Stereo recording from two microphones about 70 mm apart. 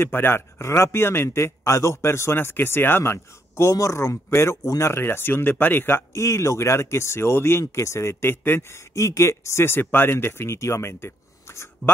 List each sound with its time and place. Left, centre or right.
0.0 s a man's voice: left